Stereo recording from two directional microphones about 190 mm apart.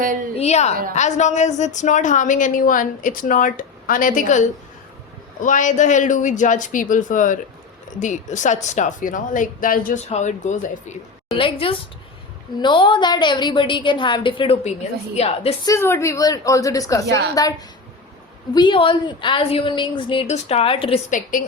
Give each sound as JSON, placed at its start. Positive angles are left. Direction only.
{"t": 0.0, "sound": "a woman's voice", "side_deg": -45}
{"t": 0.3, "sound": "a woman's voice", "side_deg": 35}
{"t": 11.3, "sound": "a woman's voice", "side_deg": 30}
{"t": 15.6, "sound": "a woman's voice", "side_deg": 15}
{"t": 18.5, "sound": "a woman's voice", "side_deg": 25}
{"t": 21.1, "sound": "speech", "side_deg": 45}